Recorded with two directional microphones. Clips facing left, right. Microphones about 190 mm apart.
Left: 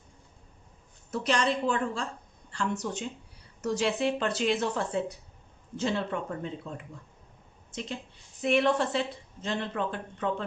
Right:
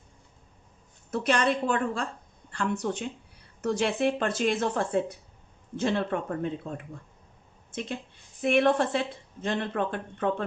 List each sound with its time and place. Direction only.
1.1 s a woman's voice: 55° right (ahead or behind)
8.4 s speech: 55° right (ahead or behind)